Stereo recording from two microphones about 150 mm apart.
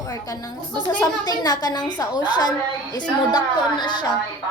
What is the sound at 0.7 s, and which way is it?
A woman's voice, 25° left (ahead or behind).